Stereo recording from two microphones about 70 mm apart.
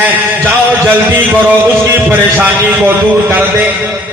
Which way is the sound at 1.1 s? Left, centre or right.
Right.